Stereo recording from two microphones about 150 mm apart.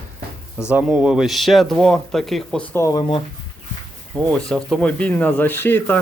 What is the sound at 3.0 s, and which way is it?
Speech, 35° left (ahead or behind).